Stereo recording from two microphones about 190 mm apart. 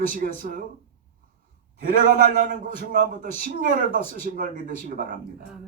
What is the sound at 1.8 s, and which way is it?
Speech, 45° right (ahead or behind).